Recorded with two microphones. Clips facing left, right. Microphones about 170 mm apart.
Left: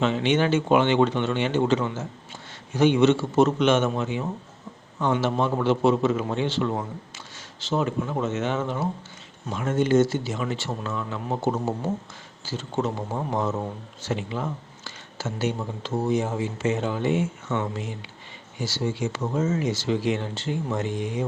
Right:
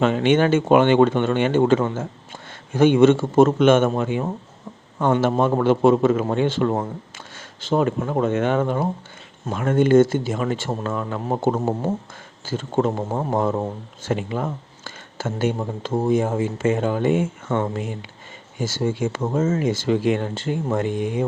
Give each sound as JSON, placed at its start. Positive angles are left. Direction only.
{"t": 0.0, "sound": "speech", "side_deg": -50}